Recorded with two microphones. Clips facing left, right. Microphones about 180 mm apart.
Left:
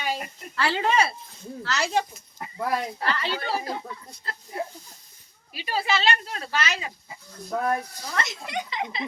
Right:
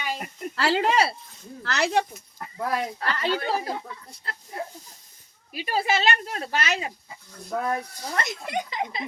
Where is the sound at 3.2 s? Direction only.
45° right (ahead or behind).